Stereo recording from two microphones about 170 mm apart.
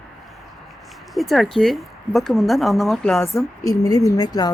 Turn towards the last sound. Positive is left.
turn(degrees=20)  # may be behind; listen again after turning